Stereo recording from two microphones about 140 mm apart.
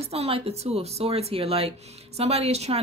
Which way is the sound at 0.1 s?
45° right (ahead or behind).